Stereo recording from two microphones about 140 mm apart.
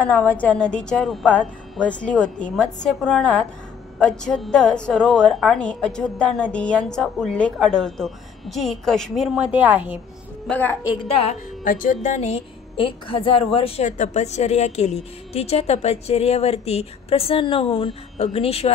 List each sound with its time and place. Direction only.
0.0 s a woman's voice: 10° left (ahead or behind); by 9.9 s 10° right (ahead or behind)
10.5 s a woman's voice: 15° left (ahead or behind)
11.6 s a woman's voice: 75° left (ahead or behind); by 13.8 s 45° left (ahead or behind)
13.8 s a woman's voice: 60° left (ahead or behind)